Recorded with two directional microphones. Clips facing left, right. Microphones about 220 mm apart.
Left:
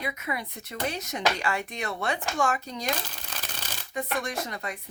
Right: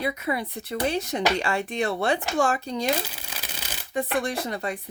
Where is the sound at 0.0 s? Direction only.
35° right (ahead or behind).